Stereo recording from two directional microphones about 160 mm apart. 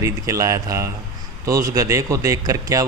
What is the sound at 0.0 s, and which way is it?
A man's voice, 20° right (ahead or behind).